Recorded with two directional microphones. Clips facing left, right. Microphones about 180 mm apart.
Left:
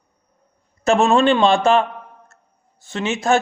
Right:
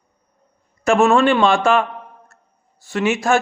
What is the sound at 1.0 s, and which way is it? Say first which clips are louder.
A man's voice: right 1 dB; 30° left (ahead or behind).